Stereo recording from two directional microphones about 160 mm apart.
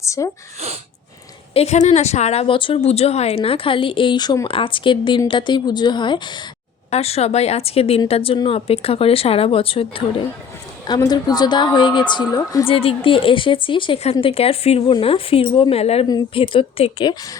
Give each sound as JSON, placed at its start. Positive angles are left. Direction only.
{"t": 0.0, "sound": "speech", "side_deg": 20}
{"t": 1.5, "sound": "a woman's voice", "side_deg": 45}
{"t": 6.9, "sound": "a woman's voice", "side_deg": 40}
{"t": 10.8, "sound": "a woman's voice", "side_deg": 25}
{"t": 12.6, "sound": "a woman's voice", "side_deg": 35}